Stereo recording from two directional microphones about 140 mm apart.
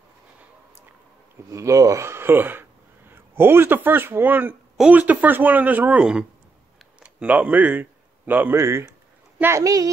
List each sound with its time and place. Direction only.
1.5 s speech: 20° right (ahead or behind)